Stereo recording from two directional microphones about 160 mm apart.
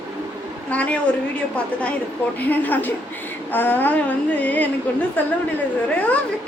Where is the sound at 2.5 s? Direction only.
10° left (ahead or behind).